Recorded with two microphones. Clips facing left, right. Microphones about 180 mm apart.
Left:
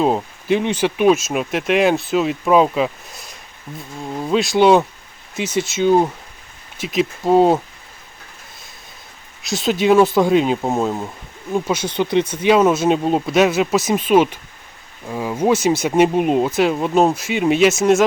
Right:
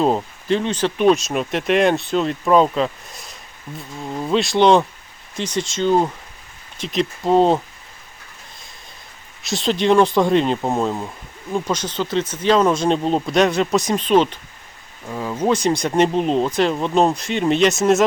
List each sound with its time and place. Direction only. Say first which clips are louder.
0.0 s speech: left 1 dB; 5° left (ahead or behind)
9.4 s speech: left 1 dB; centre (ahead or behind)